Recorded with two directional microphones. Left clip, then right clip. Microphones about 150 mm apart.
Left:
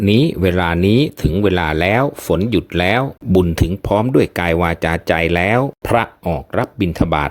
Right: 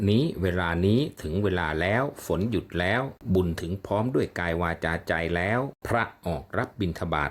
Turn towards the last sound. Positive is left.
turn(degrees=50)  # may be behind; listen again after turning